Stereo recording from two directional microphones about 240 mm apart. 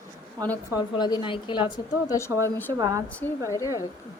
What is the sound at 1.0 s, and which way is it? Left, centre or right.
A woman's voice, centre.